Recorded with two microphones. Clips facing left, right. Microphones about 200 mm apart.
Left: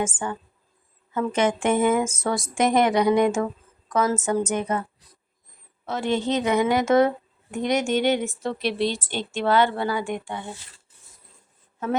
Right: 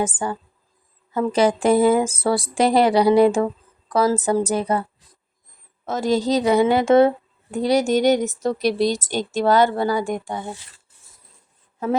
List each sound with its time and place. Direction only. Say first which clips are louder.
0.0 s speech: right 3 dB; 35° right (ahead or behind)